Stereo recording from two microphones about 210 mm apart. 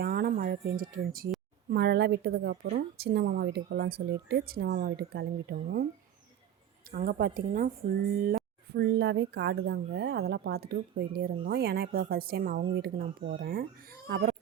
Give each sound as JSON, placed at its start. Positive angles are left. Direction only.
{"t": 0.0, "sound": "a sound", "side_deg": -45}
{"t": 1.7, "sound": "speech", "side_deg": -50}
{"t": 6.9, "sound": "a child's voice", "side_deg": -45}